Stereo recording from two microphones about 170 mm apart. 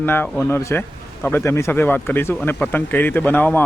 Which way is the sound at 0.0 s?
10° left (ahead or behind).